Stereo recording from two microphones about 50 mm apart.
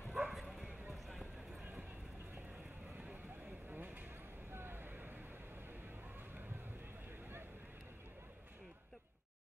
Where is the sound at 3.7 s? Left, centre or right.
Right.